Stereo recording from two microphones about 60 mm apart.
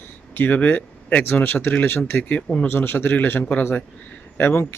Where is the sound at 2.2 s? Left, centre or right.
Left.